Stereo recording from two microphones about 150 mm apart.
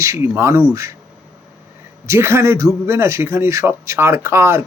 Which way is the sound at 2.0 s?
20° right (ahead or behind).